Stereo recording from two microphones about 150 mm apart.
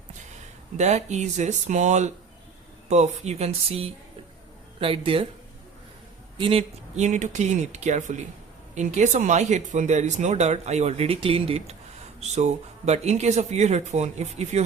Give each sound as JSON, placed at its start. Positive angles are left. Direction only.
{"t": 0.8, "sound": "speech", "side_deg": -50}
{"t": 6.3, "sound": "speech", "side_deg": -35}